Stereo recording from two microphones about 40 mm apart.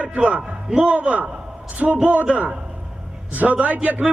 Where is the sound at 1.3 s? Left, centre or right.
Right.